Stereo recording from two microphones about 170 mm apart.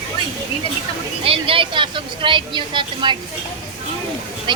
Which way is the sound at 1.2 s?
30° right (ahead or behind).